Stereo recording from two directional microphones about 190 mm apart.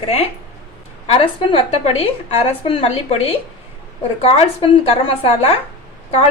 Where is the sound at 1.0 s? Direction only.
30° left (ahead or behind).